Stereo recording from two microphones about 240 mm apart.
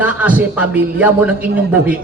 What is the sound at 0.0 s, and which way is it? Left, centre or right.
A man's voice, centre.